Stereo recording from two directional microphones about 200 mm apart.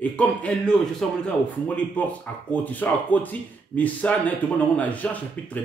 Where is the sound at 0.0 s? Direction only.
5° left (ahead or behind).